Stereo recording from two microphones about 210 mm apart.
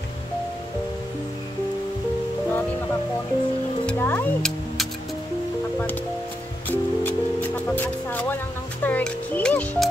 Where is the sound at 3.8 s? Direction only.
10° left (ahead or behind).